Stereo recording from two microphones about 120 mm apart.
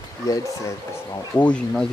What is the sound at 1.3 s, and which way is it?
Speech, 10° left (ahead or behind).